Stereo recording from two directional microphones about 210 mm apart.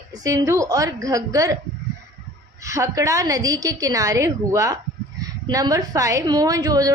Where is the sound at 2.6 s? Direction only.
15° right (ahead or behind).